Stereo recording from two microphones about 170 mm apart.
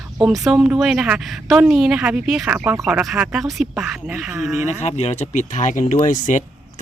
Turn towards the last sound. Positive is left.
turn(degrees=50)  # may be behind; listen again after turning